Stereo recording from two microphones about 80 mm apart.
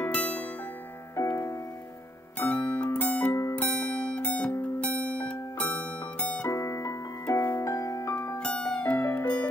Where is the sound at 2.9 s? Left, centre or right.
Centre.